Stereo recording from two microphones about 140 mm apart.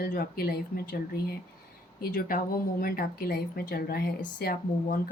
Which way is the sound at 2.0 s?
85° left.